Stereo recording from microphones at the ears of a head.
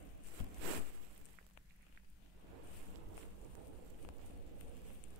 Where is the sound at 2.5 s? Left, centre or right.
Right.